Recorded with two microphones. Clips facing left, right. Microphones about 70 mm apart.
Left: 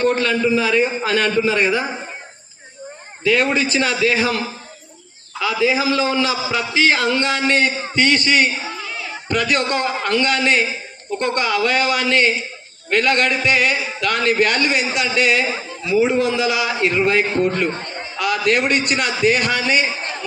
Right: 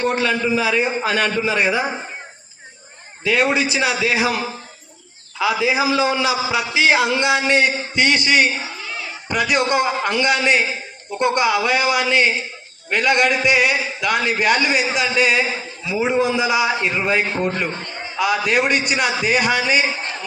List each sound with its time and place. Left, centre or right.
0.0 s a man's voice: centre
3.2 s a man's voice: centre
5.4 s a man's voice: centre
17.7 s speech: left
18.2 s a man's voice: centre